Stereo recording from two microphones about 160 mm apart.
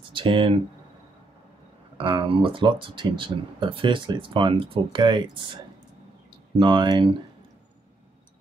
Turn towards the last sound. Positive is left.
turn(degrees=-30)  # may be behind; listen again after turning